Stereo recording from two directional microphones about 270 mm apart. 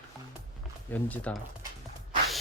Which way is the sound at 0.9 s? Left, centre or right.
Centre.